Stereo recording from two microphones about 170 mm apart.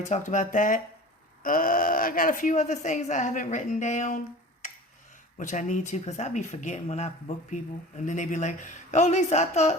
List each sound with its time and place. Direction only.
0.0 s speech: 45° left (ahead or behind)
4.6 s tick-tock: 45° left (ahead or behind)
5.4 s speech: 45° left (ahead or behind)